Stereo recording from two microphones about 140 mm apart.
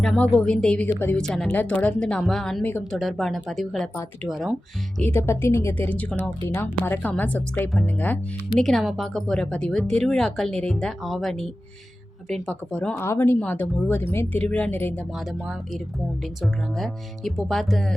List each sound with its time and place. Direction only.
0.0 s a woman's voice: 5° left (ahead or behind)
4.9 s a woman's voice: 15° left (ahead or behind)
6.4 s a woman's voice: 20° left (ahead or behind)
13.0 s a woman's voice: 20° left (ahead or behind)
15.1 s speech: 5° right (ahead or behind)